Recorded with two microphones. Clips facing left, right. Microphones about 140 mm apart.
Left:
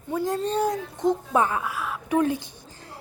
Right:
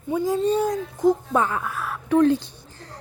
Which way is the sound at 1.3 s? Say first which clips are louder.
Even; 15° left (ahead or behind).